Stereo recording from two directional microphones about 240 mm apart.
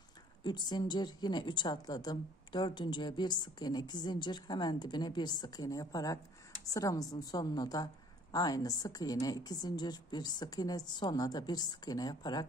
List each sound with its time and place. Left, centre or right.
0.4 s a woman's voice: centre